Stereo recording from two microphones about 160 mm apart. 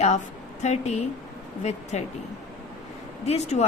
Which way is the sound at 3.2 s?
45° left (ahead or behind).